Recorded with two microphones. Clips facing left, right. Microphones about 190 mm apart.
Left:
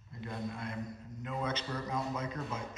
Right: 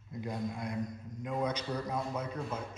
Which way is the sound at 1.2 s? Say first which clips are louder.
Right 3 dB; 15° right (ahead or behind).